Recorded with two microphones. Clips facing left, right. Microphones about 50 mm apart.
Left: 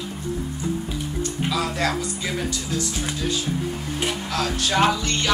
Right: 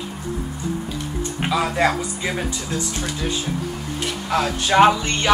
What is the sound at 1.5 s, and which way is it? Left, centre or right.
Speech, right.